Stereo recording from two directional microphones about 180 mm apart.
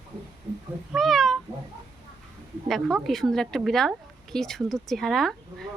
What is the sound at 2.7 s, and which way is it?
A woman's voice, centre (ahead or behind).